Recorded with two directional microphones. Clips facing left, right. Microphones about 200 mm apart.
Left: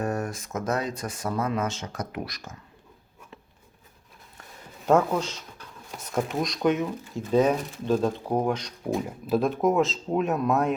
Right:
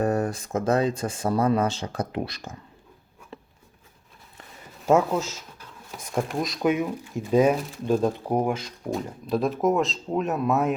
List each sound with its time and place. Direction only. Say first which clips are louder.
0.0 s speech: right 5 dB; 35° right (ahead or behind)
4.9 s speech: right 1 dB; 5° right (ahead or behind)